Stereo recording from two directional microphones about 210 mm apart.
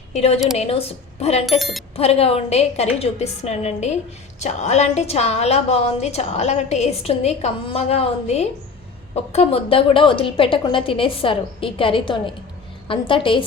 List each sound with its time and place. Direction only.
0.1 s a woman's voice: 30° left (ahead or behind)
1.5 s speech: centre (ahead or behind)
2.0 s a woman's voice: 30° left (ahead or behind)